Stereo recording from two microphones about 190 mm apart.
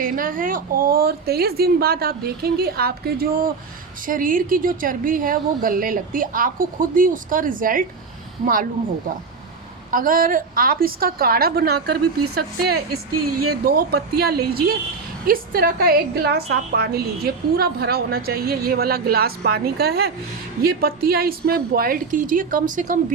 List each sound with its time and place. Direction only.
0.0 s a woman's voice: 45° right (ahead or behind)
9.9 s a woman's voice: 45° right (ahead or behind)